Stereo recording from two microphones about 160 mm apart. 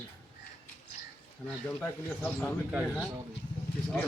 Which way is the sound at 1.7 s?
5° left (ahead or behind).